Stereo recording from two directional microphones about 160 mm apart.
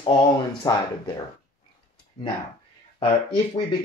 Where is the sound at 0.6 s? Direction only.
25° left (ahead or behind).